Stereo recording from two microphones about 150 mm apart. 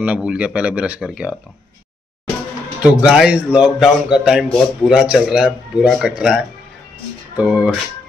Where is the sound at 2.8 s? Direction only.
5° right (ahead or behind).